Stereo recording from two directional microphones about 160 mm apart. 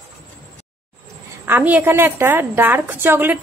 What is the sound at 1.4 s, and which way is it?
A woman's voice, 10° right (ahead or behind).